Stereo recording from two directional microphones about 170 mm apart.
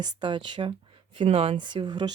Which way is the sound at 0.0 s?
30° right (ahead or behind).